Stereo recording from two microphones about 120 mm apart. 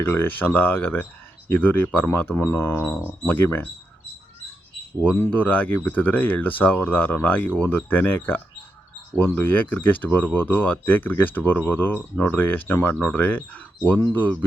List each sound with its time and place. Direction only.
0.0 s speech: 15° left (ahead or behind)
5.0 s speech: 10° left (ahead or behind)